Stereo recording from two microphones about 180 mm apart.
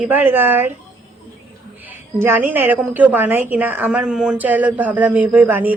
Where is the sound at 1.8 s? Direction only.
10° right (ahead or behind).